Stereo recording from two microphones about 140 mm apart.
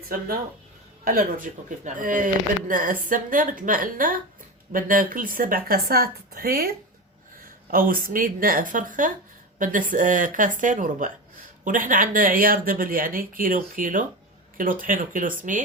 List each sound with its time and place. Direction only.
1.0 s speech: 75° right (ahead or behind)